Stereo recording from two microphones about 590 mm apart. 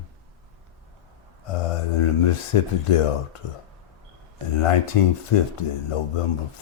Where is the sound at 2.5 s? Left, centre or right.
Left.